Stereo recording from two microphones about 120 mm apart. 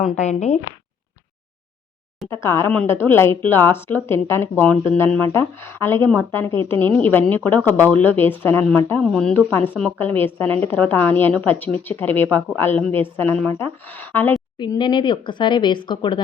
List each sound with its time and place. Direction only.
0.2 s speech: 70° left (ahead or behind)
2.3 s a woman's voice: 20° left (ahead or behind); by 9.4 s 5° left (ahead or behind)
10.0 s a woman's voice: 15° left (ahead or behind)
14.6 s speech: 40° left (ahead or behind)